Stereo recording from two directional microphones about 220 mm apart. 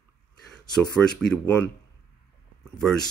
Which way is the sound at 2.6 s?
Centre (ahead or behind).